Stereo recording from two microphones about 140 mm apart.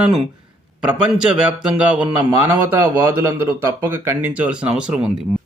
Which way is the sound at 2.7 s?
20° right (ahead or behind).